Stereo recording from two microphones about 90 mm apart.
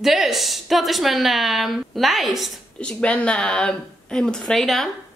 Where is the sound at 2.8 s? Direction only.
10° left (ahead or behind).